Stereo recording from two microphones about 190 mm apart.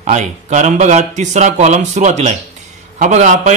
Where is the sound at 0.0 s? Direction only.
40° right (ahead or behind).